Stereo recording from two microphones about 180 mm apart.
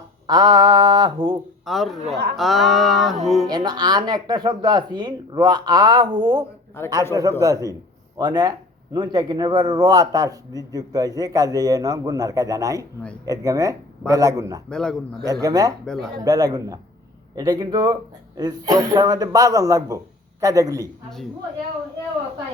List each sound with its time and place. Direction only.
0.3 s speech: 25° right (ahead or behind)
1.6 s music: centre (ahead or behind)
3.5 s speech: 25° right (ahead or behind)
6.8 s a man's voice: 15° left (ahead or behind)
7.1 s a man's voice: 20° right (ahead or behind)
14.7 s music: 5° left (ahead or behind)
15.2 s speech: 20° right (ahead or behind)
15.9 s music: 5° left (ahead or behind)
16.2 s speech: 20° right (ahead or behind)